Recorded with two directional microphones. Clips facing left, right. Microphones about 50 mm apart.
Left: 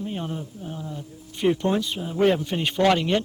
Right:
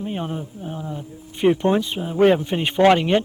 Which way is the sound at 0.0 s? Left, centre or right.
Right.